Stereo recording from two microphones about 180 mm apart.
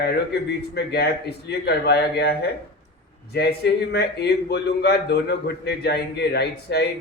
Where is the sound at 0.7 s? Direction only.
70° left (ahead or behind).